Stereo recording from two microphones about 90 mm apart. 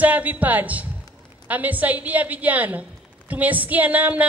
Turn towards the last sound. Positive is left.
turn(degrees=-15)  # may be behind; listen again after turning